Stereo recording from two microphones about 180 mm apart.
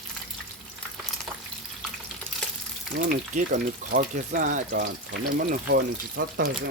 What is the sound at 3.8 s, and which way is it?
Speech, 50° right (ahead or behind).